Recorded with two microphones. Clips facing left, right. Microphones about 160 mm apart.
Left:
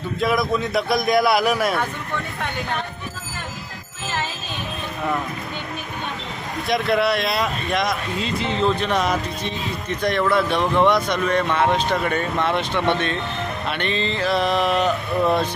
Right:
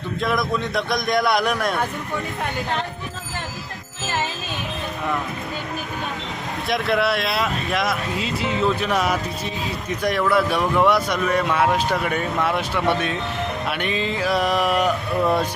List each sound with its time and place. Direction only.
0.2 s speech: centre (ahead or behind)
6.7 s speech: centre (ahead or behind)